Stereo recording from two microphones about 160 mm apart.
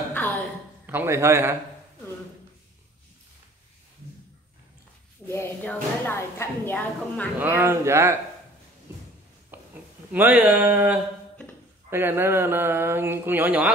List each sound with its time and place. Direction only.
0.8 s mantra: 15° right (ahead or behind)
5.3 s a woman's voice: 10° left (ahead or behind)
7.3 s mantra: 15° right (ahead or behind)
9.5 s a sound: 10° right (ahead or behind)
10.1 s mantra: 10° right (ahead or behind)